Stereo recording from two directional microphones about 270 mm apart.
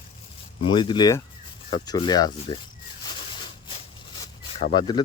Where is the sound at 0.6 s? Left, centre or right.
Centre.